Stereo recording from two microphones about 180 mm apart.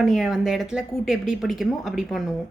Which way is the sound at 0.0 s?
Centre (ahead or behind).